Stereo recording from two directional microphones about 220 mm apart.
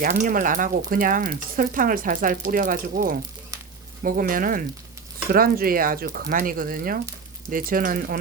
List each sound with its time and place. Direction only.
0.0 s speech: 40° right (ahead or behind)